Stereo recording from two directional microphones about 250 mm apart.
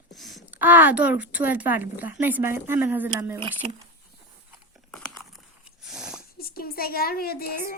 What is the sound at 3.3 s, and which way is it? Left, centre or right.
Speech, right.